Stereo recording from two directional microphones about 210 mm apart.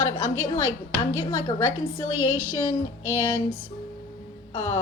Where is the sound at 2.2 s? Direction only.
75° left (ahead or behind).